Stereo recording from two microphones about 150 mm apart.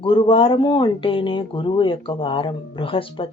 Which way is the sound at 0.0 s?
35° left (ahead or behind).